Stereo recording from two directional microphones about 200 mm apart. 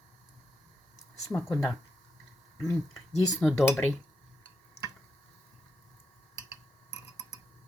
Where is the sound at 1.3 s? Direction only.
Centre (ahead or behind).